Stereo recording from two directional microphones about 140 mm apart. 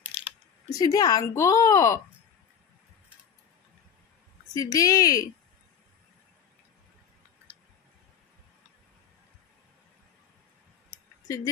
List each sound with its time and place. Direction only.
0.7 s speech: 25° left (ahead or behind)
4.6 s speech: 25° left (ahead or behind)
11.2 s speech: 25° left (ahead or behind)